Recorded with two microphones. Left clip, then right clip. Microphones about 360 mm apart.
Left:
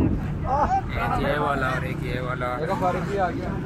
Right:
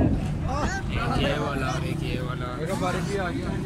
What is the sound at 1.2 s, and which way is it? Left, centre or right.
Speech, centre.